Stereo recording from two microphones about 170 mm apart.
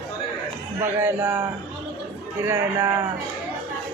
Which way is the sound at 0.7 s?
15° right (ahead or behind).